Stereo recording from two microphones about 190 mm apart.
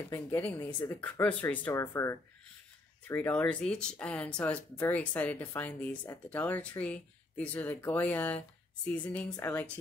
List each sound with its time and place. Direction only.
0.1 s speech: 10° left (ahead or behind)